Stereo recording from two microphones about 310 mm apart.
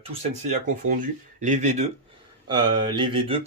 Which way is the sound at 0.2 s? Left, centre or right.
Right.